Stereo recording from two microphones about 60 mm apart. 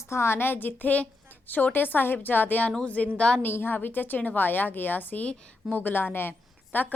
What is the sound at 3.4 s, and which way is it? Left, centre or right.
A woman's voice, left.